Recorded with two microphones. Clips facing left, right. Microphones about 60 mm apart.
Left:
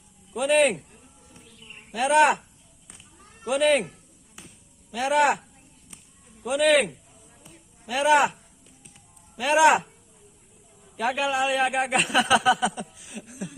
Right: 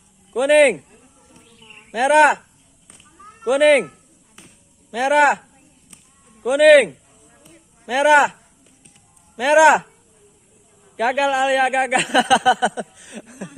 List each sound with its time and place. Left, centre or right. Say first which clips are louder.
0.4 s a man's voice: right 7 dB; right
1.9 s a man's voice: right 6 dB; right
3.4 s a man's voice: right 7 dB; right
4.4 s a sound: even; centre
4.9 s a man's voice: right 6 dB; right
6.7 s a man's voice: right 10 dB; right
9.4 s a man's voice: right 6 dB; right
10.9 s a man's voice: right 7 dB; right